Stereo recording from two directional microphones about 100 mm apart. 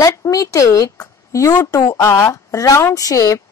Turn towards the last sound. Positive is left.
turn(degrees=35)  # may be behind; listen again after turning